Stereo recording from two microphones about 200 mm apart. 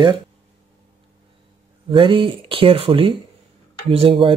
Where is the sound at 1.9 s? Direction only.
25° right (ahead or behind).